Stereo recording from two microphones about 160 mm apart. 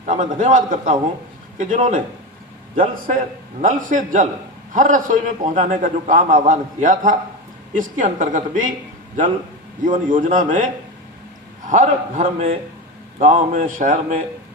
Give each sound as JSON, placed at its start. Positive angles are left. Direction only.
{"t": 0.0, "sound": "a man's voice", "side_deg": -50}
{"t": 9.8, "sound": "a man's voice", "side_deg": -55}
{"t": 11.7, "sound": "a man's voice", "side_deg": -50}